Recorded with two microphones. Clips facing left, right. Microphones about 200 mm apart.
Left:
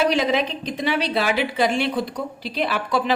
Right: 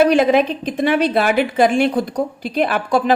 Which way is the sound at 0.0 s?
50° right (ahead or behind).